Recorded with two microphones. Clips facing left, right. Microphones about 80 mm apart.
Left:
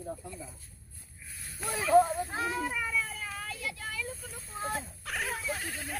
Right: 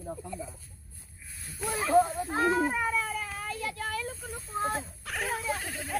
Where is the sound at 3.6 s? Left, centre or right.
Right.